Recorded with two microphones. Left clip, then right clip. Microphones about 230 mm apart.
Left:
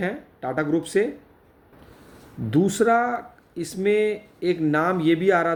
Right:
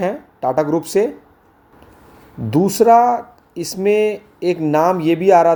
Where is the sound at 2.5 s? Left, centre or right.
Centre.